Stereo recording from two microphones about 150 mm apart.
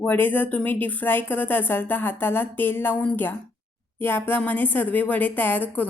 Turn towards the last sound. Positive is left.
turn(degrees=15)  # may be behind; listen again after turning